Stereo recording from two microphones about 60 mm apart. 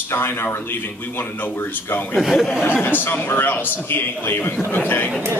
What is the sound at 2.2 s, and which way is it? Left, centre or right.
Speech, centre.